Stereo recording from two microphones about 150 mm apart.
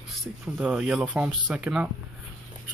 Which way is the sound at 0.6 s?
5° right (ahead or behind).